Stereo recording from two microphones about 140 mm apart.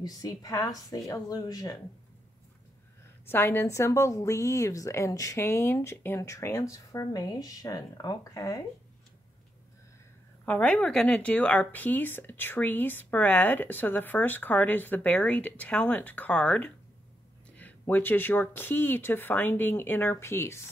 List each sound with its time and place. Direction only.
0.0 s a woman's voice: 25° left (ahead or behind)
3.3 s a woman's voice: 15° left (ahead or behind)
10.4 s a woman's voice: 10° left (ahead or behind)